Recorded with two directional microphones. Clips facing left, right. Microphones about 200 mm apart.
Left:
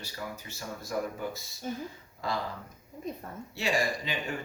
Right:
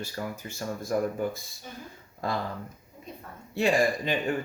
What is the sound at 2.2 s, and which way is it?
Speech, 50° right (ahead or behind).